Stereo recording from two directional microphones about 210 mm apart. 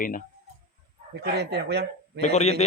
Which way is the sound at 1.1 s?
50° right (ahead or behind).